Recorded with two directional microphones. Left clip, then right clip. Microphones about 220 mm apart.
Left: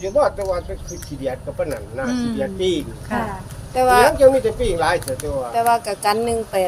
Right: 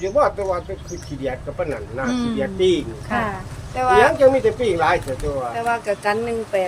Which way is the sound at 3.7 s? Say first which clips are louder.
Left 1 dB; 35° left (ahead or behind).